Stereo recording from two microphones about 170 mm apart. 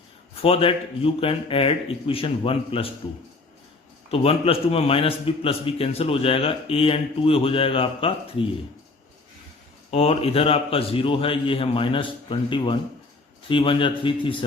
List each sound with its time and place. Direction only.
0.4 s a man's voice: 35° left (ahead or behind)
4.1 s a man's voice: 35° left (ahead or behind)
9.9 s a man's voice: 35° left (ahead or behind)